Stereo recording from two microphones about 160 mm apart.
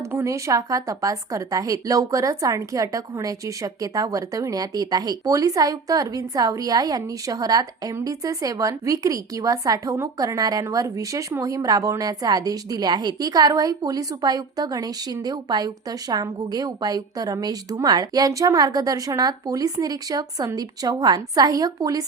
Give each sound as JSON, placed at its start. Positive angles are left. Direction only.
{"t": 0.1, "sound": "speech", "side_deg": -15}